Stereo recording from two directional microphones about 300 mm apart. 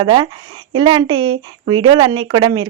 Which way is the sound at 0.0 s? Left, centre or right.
Centre.